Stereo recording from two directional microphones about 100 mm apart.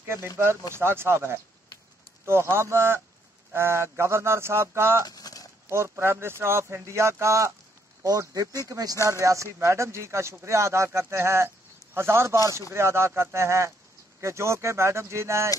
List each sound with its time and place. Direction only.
0.0 s speech: 25° right (ahead or behind)
2.5 s speech: 25° right (ahead or behind)
5.0 s a sound: 40° left (ahead or behind)
5.7 s speech: 25° right (ahead or behind)